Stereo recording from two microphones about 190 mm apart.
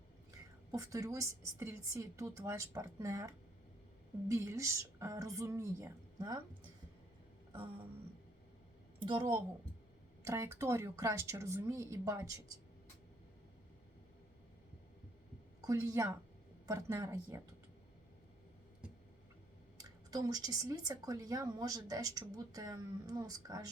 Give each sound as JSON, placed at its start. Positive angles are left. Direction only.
{"t": 0.7, "sound": "a woman's voice", "side_deg": -15}
{"t": 9.0, "sound": "a woman's voice", "side_deg": -25}
{"t": 10.2, "sound": "a woman's voice", "side_deg": -15}
{"t": 15.6, "sound": "a woman's voice", "side_deg": -15}
{"t": 19.8, "sound": "speech", "side_deg": -20}